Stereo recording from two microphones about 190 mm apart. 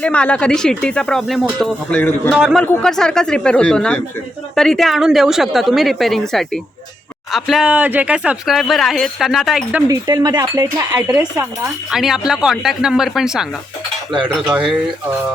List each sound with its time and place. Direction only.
0.0 s speech: 5° left (ahead or behind)
9.9 s speech: 20° right (ahead or behind); by 14.7 s 5° right (ahead or behind)